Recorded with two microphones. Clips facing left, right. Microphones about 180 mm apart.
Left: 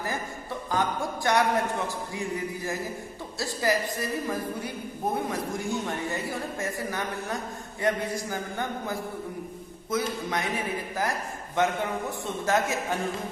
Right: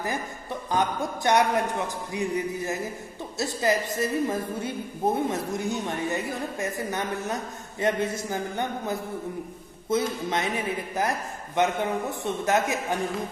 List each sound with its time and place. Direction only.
0.7 s a woman's voice: 20° right (ahead or behind)
11.6 s a woman's voice: 20° right (ahead or behind)